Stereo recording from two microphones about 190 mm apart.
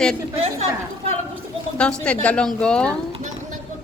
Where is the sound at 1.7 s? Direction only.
5° left (ahead or behind).